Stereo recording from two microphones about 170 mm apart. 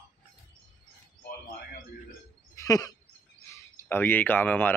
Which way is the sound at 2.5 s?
20° left (ahead or behind).